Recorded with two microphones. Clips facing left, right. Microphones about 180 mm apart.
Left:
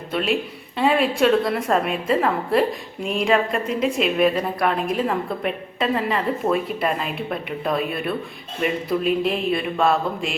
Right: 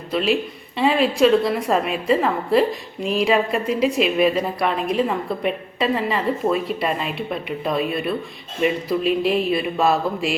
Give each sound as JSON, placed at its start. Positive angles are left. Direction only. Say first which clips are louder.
{"t": 0.1, "sound": "a woman's voice", "louder": "right 2 dB", "side_deg": 0}